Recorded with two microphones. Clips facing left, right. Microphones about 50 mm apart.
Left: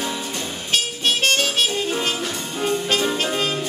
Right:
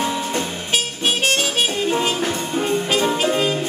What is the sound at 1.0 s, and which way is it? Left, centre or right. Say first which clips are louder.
Music: even; centre.